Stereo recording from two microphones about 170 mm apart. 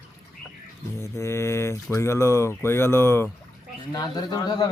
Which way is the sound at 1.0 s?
15° left (ahead or behind).